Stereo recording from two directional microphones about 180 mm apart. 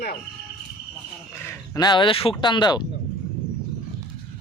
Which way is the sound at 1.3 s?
15° left (ahead or behind).